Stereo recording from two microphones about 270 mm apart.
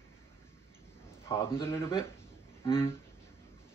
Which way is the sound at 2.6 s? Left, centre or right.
Centre.